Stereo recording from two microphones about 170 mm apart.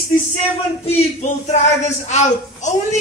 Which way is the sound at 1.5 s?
45° left (ahead or behind).